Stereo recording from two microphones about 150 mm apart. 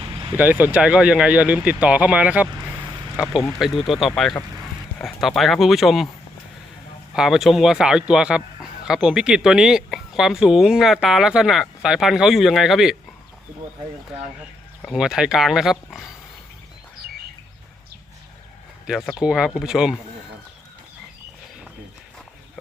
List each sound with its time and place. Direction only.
0.0 s vehicle: 25° right (ahead or behind)
0.3 s speech: 10° right (ahead or behind)
3.8 s speech: centre (ahead or behind)
7.1 s speech: 5° right (ahead or behind)
14.8 s speech: centre (ahead or behind)
18.9 s speech: centre (ahead or behind)